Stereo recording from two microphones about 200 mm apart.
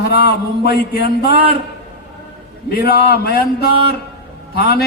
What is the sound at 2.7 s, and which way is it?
A man's voice, 50° left (ahead or behind).